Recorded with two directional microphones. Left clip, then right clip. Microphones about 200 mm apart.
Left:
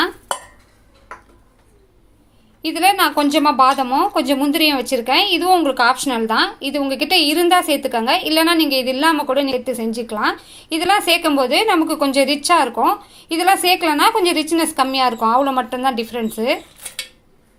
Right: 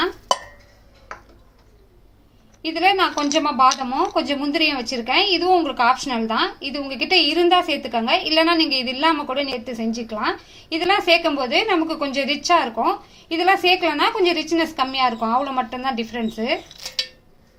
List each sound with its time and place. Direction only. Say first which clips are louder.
2.6 s a woman's voice: left 3 dB; 40° left (ahead or behind)